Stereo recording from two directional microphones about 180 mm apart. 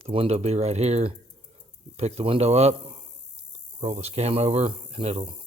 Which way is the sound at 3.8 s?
35° right (ahead or behind).